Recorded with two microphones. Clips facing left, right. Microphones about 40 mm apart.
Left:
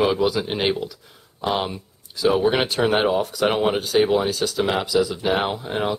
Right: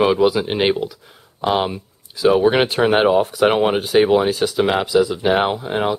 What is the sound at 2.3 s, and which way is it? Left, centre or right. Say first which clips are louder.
Speech: right 5 dB; centre.